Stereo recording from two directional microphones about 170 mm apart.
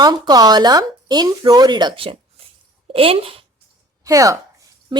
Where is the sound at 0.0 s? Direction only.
25° right (ahead or behind).